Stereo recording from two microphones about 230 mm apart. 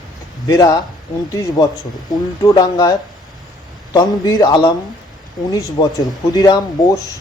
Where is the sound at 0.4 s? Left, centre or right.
Centre.